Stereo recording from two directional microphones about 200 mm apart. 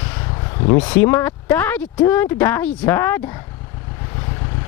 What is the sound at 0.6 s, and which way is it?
Speech, 25° left (ahead or behind).